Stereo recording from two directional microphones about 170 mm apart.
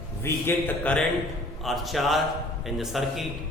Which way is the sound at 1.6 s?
Centre (ahead or behind).